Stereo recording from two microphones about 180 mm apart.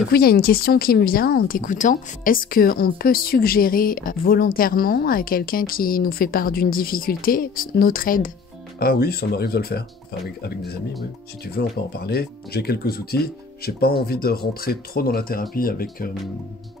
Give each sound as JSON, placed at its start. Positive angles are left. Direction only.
{"t": 0.1, "sound": "speech", "side_deg": 55}